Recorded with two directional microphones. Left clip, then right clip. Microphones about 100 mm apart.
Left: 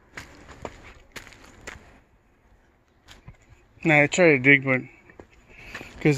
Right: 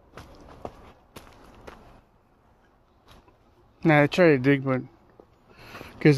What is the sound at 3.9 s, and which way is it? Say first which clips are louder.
Speech: left 1 dB; 40° right (ahead or behind).